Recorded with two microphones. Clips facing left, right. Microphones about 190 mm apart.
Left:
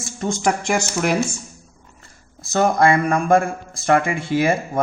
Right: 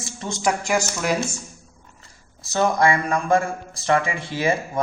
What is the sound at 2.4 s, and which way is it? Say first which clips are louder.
Speech: left 3 dB; 50° left (ahead or behind).